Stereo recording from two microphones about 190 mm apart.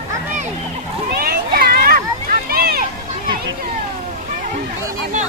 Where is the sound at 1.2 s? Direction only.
50° right (ahead or behind).